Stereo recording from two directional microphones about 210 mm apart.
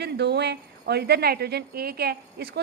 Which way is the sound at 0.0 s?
50° right (ahead or behind).